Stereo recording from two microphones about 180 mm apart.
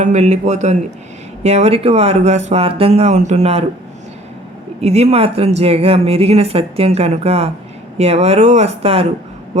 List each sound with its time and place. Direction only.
0.0 s speech: 40° right (ahead or behind)
4.8 s speech: 35° right (ahead or behind)